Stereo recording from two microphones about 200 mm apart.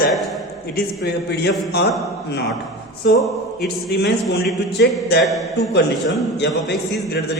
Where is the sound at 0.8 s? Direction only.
55° left (ahead or behind).